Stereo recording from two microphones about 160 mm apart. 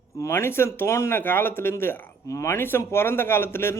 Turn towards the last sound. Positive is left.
turn(degrees=15)  # may be behind; listen again after turning